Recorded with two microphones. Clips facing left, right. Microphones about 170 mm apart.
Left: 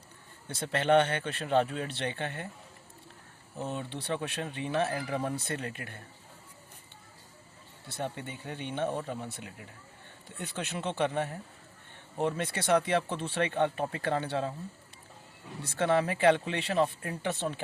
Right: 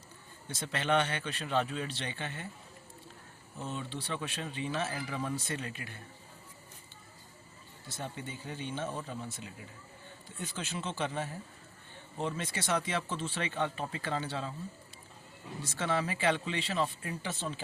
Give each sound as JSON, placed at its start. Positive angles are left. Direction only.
{"t": 0.4, "sound": "speech", "side_deg": 55}
{"t": 3.7, "sound": "speech", "side_deg": 60}
{"t": 7.9, "sound": "speech", "side_deg": 60}
{"t": 15.6, "sound": "speech", "side_deg": 60}